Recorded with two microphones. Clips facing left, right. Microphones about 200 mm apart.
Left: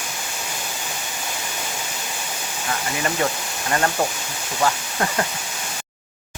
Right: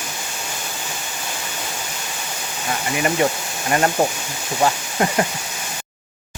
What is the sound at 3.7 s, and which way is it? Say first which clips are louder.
Speech: right 4 dB; 20° right (ahead or behind).